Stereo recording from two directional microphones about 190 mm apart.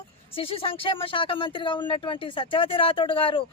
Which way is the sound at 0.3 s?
30° left (ahead or behind).